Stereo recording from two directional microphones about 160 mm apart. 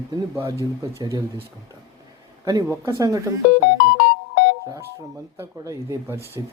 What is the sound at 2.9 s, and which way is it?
Speech, 20° right (ahead or behind).